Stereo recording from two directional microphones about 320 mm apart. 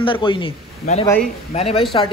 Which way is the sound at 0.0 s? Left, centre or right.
Centre.